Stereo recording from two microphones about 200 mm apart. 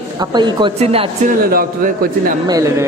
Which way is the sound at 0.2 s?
20° right (ahead or behind).